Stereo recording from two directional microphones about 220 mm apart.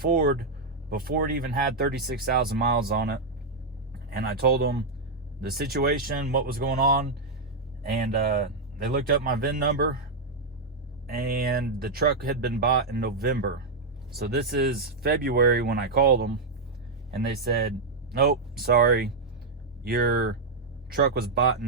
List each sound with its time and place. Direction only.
0.0 s speech: 45° right (ahead or behind)
8.2 s speech: 45° right (ahead or behind)
11.0 s speech: 45° right (ahead or behind)